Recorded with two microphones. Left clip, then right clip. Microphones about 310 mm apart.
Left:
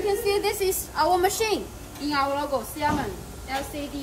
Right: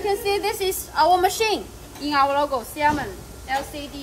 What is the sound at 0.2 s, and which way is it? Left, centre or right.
Speech, centre.